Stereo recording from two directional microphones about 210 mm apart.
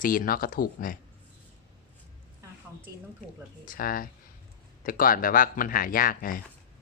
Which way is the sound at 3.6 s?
40° left (ahead or behind).